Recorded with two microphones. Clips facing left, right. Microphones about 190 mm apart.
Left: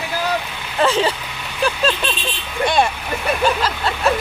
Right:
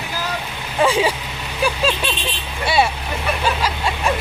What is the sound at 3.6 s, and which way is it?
Vehicle, 10° right (ahead or behind).